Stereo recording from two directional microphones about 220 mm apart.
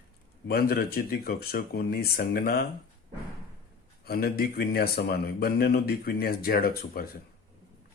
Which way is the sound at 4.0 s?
45° left (ahead or behind).